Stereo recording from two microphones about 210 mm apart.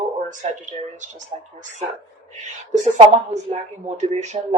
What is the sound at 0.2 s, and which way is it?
Speech, 35° right (ahead or behind).